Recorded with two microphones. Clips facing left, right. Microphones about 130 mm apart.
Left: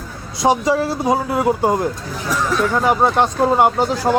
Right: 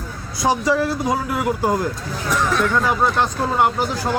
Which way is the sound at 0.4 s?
20° left (ahead or behind).